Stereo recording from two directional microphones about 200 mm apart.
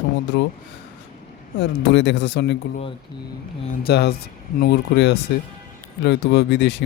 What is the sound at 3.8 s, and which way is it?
Speech, 55° left (ahead or behind).